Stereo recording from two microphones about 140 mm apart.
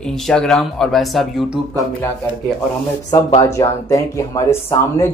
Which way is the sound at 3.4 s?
20° left (ahead or behind).